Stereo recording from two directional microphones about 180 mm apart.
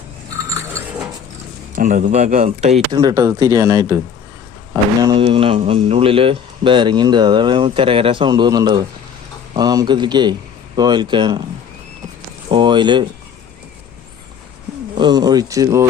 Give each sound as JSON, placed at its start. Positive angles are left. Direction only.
{"t": 1.7, "sound": "speech", "side_deg": -50}
{"t": 2.9, "sound": "speech", "side_deg": -20}
{"t": 12.5, "sound": "speech", "side_deg": -25}
{"t": 14.9, "sound": "speech", "side_deg": -25}